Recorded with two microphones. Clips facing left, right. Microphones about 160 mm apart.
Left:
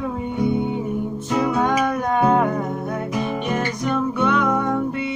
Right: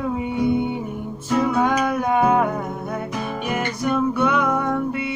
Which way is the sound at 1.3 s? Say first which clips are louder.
Right 1 dB; centre (ahead or behind).